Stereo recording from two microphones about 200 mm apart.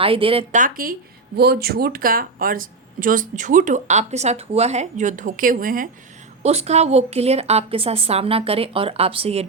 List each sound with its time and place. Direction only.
0.0 s speech: 25° right (ahead or behind)
0.6 s speech: 45° right (ahead or behind)
6.4 s a woman's voice: 30° right (ahead or behind)